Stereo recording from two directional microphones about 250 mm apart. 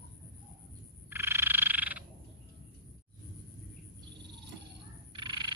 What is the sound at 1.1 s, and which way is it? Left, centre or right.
Frog, centre.